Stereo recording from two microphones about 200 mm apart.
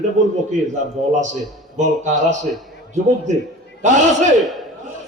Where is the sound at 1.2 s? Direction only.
35° right (ahead or behind).